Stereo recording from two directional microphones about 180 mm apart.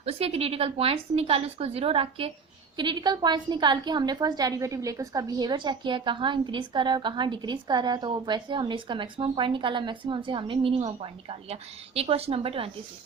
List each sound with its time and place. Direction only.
0.0 s a woman's voice: 35° right (ahead or behind)